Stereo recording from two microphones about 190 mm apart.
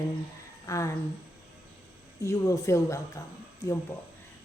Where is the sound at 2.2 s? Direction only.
15° left (ahead or behind).